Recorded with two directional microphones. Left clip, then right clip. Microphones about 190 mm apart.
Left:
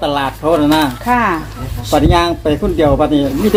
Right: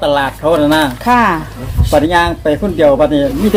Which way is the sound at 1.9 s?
5° right (ahead or behind).